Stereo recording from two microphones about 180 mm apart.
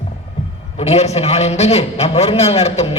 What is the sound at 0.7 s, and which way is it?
A man's voice, 35° left (ahead or behind).